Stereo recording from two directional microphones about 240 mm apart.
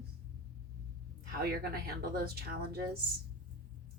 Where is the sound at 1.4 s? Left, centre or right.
Right.